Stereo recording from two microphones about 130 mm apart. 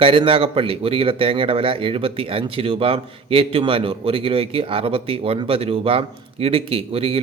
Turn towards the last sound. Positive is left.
turn(degrees=-45)  # may be behind; listen again after turning